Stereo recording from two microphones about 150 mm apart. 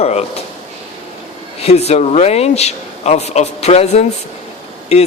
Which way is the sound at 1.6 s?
45° left (ahead or behind).